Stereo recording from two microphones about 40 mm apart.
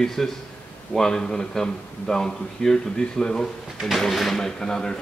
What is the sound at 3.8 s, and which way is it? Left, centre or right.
A man's voice, centre.